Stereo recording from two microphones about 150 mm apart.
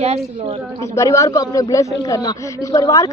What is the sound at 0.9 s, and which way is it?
Speech, 20° left (ahead or behind).